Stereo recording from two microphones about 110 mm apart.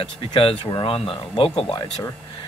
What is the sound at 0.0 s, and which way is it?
Speech, 50° left (ahead or behind).